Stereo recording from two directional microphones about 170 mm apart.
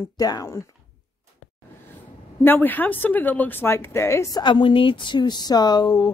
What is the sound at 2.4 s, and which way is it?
Speech, 10° left (ahead or behind).